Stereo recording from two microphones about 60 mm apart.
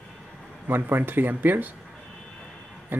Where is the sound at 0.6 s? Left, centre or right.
Right.